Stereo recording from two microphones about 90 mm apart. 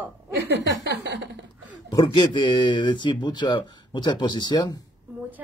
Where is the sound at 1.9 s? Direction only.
60° left (ahead or behind); by 4.8 s 45° left (ahead or behind).